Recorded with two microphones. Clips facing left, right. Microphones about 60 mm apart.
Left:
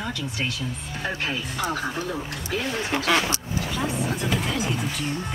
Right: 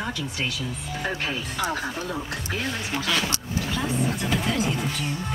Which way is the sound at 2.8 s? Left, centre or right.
Left.